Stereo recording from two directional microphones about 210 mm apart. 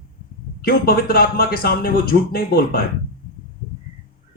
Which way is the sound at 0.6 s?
45° left (ahead or behind).